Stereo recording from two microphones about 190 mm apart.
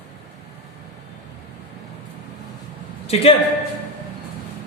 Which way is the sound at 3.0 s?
30° left (ahead or behind).